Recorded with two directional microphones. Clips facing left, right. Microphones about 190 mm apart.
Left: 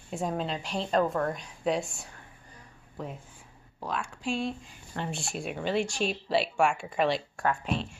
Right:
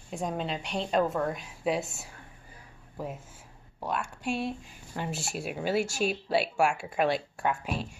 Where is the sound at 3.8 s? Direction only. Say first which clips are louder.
Right 1 dB; 5° right (ahead or behind).